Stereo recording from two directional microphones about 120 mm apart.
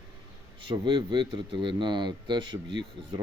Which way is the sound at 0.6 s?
40° right (ahead or behind).